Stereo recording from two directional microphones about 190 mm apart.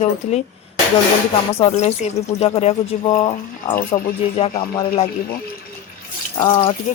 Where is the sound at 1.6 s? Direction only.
35° left (ahead or behind).